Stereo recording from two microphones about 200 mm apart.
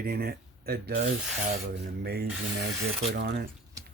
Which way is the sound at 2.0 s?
50° right (ahead or behind).